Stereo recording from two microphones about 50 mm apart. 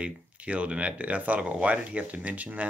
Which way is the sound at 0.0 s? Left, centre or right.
Right.